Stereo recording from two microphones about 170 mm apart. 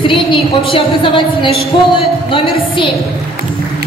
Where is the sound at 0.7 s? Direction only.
30° left (ahead or behind).